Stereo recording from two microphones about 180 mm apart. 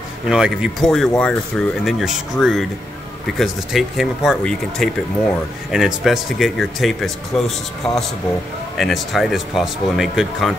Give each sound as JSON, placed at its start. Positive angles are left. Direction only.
{"t": 0.3, "sound": "speech", "side_deg": -5}